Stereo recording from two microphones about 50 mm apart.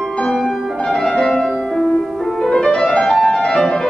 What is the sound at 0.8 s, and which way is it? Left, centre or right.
Music, centre.